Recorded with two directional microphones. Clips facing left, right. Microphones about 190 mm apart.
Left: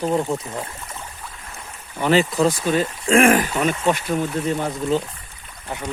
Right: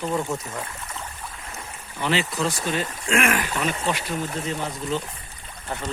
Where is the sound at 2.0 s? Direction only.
45° left (ahead or behind).